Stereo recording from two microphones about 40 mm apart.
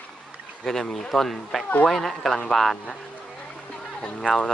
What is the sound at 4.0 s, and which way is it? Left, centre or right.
Speech, left.